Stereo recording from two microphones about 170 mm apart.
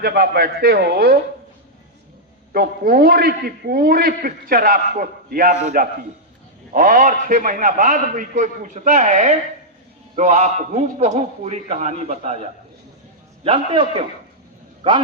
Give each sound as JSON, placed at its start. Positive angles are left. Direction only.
{"t": 0.0, "sound": "a man's voice", "side_deg": -65}
{"t": 2.5, "sound": "a man's voice", "side_deg": -65}